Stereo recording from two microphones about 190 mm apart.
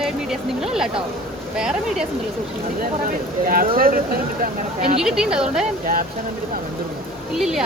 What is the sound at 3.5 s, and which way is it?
Speech, 50° right (ahead or behind).